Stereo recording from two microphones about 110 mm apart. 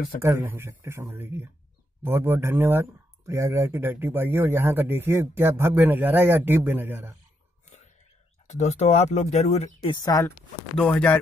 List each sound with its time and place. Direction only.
0.2 s speech: 25° right (ahead or behind)
8.5 s speech: 90° left; by 9.7 s 75° left (ahead or behind)
10.0 s speech: 30° left (ahead or behind)
10.8 s speech: 10° left (ahead or behind)